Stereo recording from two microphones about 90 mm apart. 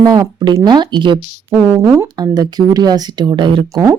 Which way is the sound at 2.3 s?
50° right (ahead or behind).